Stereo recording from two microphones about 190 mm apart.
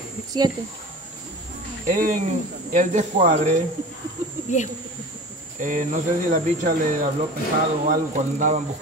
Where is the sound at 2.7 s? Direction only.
40° right (ahead or behind).